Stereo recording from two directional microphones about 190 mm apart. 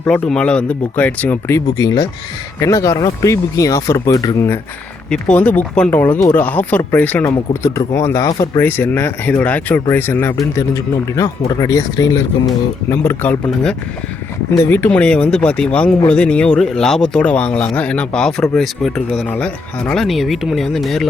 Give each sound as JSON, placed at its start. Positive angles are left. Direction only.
{"t": 0.0, "sound": "speech", "side_deg": 5}